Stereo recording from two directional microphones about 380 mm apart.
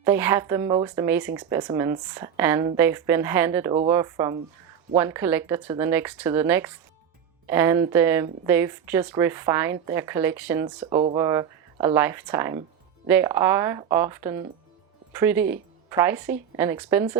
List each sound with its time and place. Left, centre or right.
0.0 s speech: centre